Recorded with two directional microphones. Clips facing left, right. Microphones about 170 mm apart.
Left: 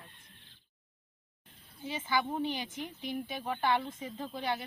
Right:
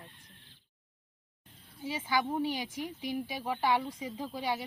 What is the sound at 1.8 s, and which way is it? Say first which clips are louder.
Speech: right 1 dB; 10° right (ahead or behind).